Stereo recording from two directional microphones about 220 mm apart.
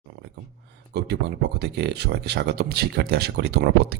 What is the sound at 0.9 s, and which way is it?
Speech, 50° right (ahead or behind).